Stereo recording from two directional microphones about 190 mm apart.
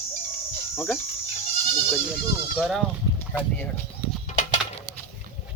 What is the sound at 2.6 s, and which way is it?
Speech, centre (ahead or behind).